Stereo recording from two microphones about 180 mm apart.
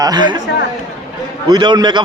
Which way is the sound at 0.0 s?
25° right (ahead or behind).